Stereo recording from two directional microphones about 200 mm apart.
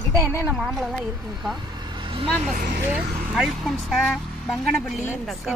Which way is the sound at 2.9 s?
Centre (ahead or behind).